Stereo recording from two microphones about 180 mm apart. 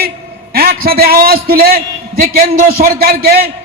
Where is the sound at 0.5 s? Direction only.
55° right (ahead or behind).